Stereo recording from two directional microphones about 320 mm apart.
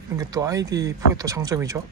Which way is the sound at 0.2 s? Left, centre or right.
Centre.